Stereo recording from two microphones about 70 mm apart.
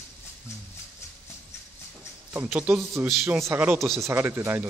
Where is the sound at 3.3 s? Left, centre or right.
Right.